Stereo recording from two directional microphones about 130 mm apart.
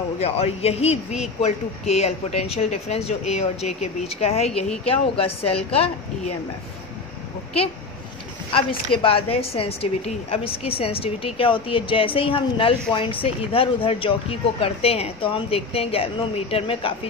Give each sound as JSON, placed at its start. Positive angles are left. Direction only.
{"t": 0.2, "sound": "a woman's voice", "side_deg": 50}
{"t": 8.5, "sound": "a woman's voice", "side_deg": 45}